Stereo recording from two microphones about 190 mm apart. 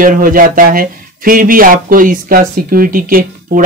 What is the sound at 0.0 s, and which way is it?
Speech, 45° right (ahead or behind).